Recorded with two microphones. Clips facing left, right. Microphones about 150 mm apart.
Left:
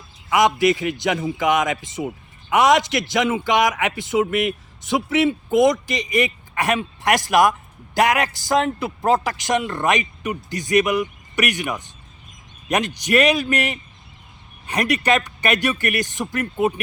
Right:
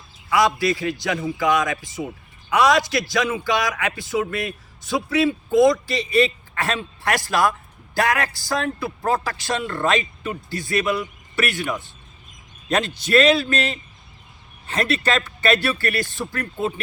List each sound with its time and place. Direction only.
0.3 s speech: 20° left (ahead or behind)